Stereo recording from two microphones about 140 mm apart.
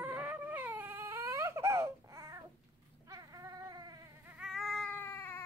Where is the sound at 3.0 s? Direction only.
25° right (ahead or behind).